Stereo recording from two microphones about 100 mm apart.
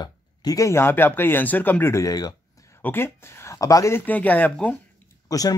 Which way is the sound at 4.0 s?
15° left (ahead or behind).